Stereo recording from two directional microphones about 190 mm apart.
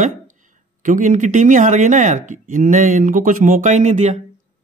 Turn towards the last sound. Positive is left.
turn(degrees=-40)  # may be behind; listen again after turning